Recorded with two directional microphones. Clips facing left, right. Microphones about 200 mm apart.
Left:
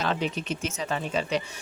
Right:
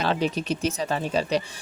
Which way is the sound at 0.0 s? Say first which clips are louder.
Right 4 dB; 35° right (ahead or behind).